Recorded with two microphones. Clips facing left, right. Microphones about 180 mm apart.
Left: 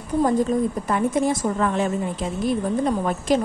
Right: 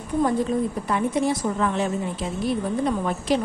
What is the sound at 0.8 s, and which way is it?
A woman's voice, 45° left (ahead or behind).